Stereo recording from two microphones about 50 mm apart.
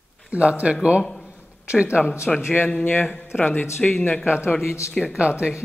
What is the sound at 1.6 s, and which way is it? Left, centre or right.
Speech, right.